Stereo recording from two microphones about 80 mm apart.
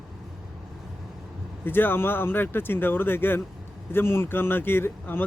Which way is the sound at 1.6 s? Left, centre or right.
Left.